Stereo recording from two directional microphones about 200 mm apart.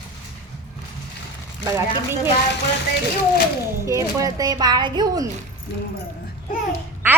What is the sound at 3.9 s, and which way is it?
Speech, 15° right (ahead or behind).